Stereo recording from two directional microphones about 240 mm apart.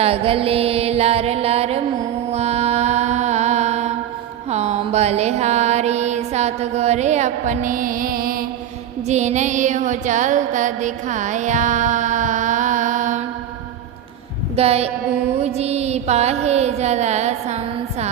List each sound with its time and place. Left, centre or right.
0.0 s music: right
14.5 s music: right